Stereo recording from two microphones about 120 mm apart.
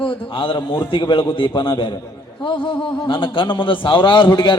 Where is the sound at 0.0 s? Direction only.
45° left (ahead or behind).